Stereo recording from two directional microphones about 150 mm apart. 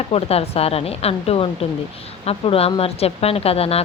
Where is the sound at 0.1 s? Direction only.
40° left (ahead or behind).